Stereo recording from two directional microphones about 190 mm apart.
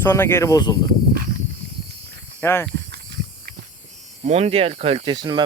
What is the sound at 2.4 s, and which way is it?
Speech, 10° left (ahead or behind).